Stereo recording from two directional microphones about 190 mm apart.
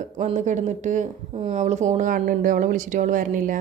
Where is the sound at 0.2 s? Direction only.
40° right (ahead or behind).